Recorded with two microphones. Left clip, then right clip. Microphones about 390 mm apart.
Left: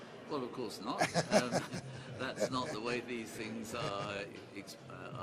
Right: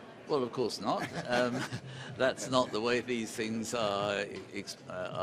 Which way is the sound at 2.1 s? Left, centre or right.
Right.